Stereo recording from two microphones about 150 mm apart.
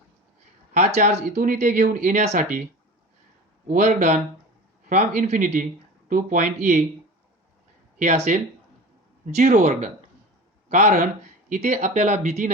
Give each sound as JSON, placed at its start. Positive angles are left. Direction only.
{"t": 0.7, "sound": "speech", "side_deg": -50}
{"t": 3.7, "sound": "speech", "side_deg": -55}
{"t": 7.9, "sound": "speech", "side_deg": -50}